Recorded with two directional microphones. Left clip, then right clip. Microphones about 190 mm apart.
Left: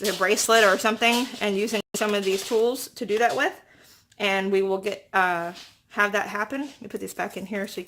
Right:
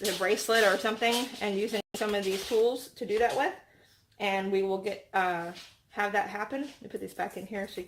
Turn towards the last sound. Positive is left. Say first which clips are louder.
# left 6 dB
turn(degrees=45)  # may be behind; listen again after turning